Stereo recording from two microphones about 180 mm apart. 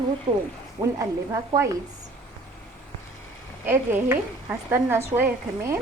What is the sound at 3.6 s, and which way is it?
Speech, 10° right (ahead or behind).